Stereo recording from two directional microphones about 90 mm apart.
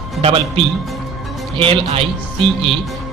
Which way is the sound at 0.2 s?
90° right.